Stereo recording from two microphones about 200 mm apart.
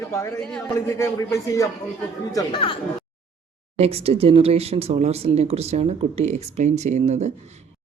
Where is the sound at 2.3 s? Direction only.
25° left (ahead or behind).